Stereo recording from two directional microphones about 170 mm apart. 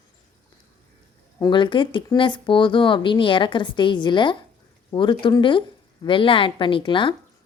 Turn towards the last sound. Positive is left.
turn(degrees=30)  # may be behind; listen again after turning